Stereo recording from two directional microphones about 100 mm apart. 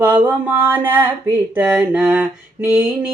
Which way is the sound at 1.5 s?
15° right (ahead or behind).